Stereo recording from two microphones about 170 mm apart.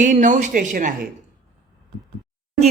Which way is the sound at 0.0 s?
45° right (ahead or behind).